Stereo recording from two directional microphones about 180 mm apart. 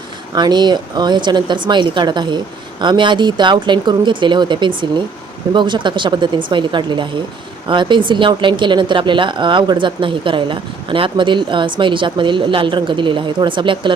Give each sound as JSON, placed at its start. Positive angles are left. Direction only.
{"t": 0.3, "sound": "speech", "side_deg": -25}